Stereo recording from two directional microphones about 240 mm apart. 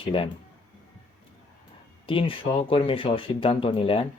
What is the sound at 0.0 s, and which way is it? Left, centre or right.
Speech, left.